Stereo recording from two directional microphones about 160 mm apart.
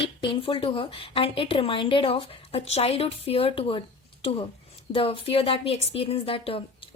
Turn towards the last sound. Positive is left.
turn(degrees=35)  # may be behind; listen again after turning